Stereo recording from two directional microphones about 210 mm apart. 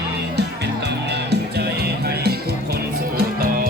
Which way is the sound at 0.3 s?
55° right (ahead or behind).